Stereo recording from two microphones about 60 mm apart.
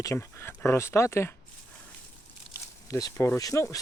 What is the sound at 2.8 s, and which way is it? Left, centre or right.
Speech, left.